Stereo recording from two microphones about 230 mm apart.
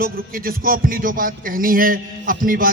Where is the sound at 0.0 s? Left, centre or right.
Right.